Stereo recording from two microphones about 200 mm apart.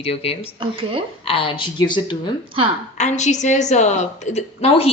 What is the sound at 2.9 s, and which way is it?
A woman's voice, 35° left (ahead or behind).